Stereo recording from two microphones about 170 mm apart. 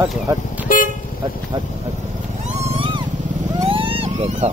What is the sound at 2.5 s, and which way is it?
Vehicle, 40° right (ahead or behind).